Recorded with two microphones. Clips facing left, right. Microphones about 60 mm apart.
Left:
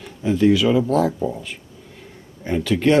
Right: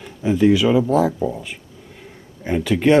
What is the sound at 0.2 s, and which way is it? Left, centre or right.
Speech, centre.